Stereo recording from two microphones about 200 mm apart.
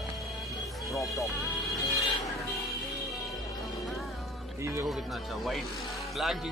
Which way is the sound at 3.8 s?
Centre (ahead or behind).